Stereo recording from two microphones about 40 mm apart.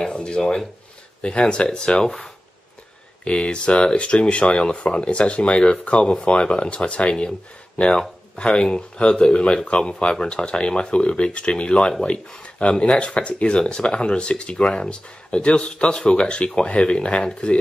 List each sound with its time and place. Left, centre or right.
0.0 s speech: left
3.3 s speech: left
8.4 s speech: left
14.6 s speech: centre
14.9 s speech: left